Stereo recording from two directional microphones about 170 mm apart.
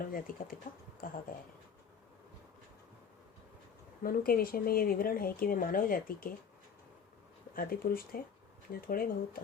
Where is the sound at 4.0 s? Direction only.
60° left (ahead or behind).